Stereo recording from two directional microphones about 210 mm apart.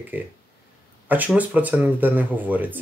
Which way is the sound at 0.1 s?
10° right (ahead or behind).